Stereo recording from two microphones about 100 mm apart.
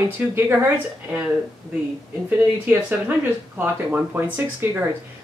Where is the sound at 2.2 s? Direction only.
15° right (ahead or behind).